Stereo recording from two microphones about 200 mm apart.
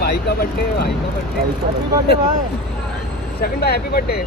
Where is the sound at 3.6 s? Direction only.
50° left (ahead or behind).